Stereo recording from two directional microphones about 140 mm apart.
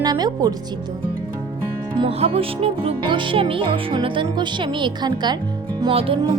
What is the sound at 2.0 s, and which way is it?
Music, 45° right (ahead or behind).